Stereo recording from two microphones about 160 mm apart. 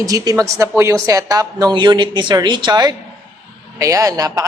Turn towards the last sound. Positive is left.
turn(degrees=-20)  # may be behind; listen again after turning